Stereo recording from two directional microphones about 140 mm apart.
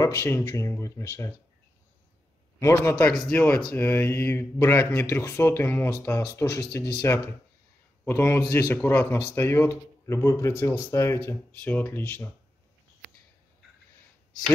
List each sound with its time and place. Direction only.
0.0 s speech: 20° left (ahead or behind)
2.6 s speech: 20° left (ahead or behind)